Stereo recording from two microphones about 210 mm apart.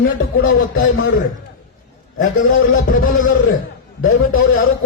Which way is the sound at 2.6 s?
70° left (ahead or behind).